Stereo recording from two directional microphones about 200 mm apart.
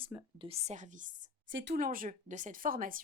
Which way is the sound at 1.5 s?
65° right (ahead or behind).